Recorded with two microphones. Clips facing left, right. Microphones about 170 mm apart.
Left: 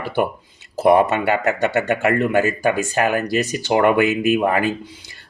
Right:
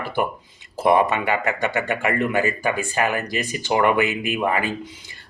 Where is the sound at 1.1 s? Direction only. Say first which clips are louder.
Left 3 dB; 45° left (ahead or behind).